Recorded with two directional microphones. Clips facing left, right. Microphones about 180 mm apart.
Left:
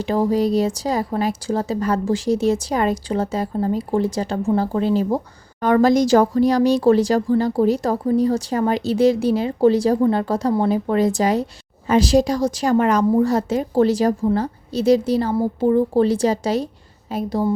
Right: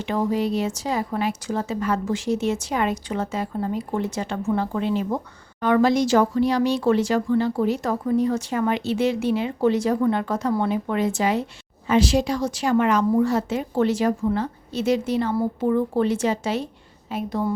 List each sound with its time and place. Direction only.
0.0 s speech: 35° left (ahead or behind)